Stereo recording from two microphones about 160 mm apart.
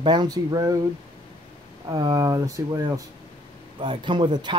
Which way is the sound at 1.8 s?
25° right (ahead or behind).